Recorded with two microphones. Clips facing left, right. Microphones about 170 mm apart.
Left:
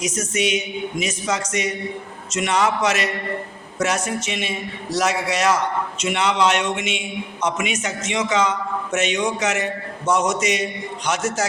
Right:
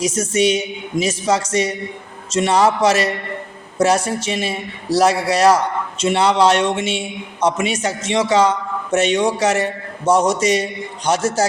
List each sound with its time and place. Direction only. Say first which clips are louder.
0.0 s a man's voice: right 6 dB; 30° right (ahead or behind)